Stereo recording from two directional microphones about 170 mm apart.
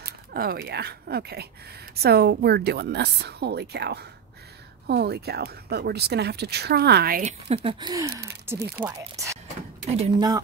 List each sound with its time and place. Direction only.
0.0 s speech: 60° right (ahead or behind)
7.4 s speech: 35° right (ahead or behind)
8.5 s speech: 15° right (ahead or behind)
9.8 s speech: 40° right (ahead or behind)